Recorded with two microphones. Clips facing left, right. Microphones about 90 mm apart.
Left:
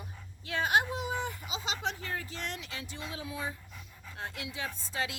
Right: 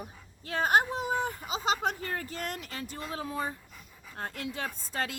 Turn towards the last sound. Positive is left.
turn(degrees=-5)  # may be behind; listen again after turning